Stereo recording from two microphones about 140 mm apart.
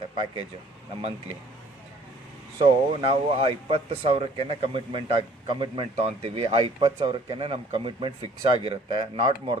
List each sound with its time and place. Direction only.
2.6 s speech: 45° right (ahead or behind)